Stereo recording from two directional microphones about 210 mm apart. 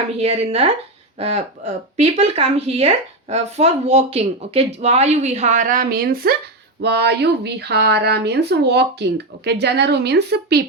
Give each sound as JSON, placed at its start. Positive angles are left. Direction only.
{"t": 0.2, "sound": "speech", "side_deg": -30}